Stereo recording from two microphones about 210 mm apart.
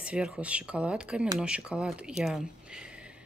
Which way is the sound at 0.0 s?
5° right (ahead or behind).